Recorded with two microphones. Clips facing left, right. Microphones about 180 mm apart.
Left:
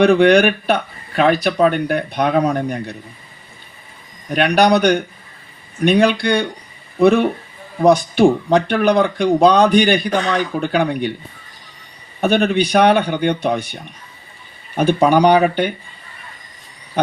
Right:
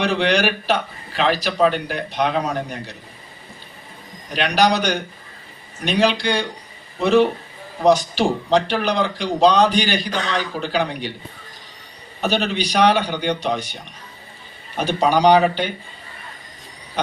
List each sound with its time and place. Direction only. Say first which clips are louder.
0.0 s speech: left 8 dB; 50° left (ahead or behind)
4.4 s speech: left 5 dB; 55° left (ahead or behind)
12.2 s speech: left 6 dB; 50° left (ahead or behind)
14.8 s speech: left 5 dB; 55° left (ahead or behind)